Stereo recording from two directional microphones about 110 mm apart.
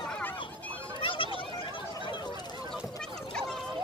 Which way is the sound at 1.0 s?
55° left (ahead or behind).